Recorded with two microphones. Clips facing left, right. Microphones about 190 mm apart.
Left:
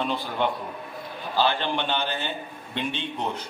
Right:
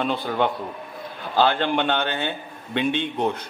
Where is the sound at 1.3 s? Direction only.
55° right (ahead or behind).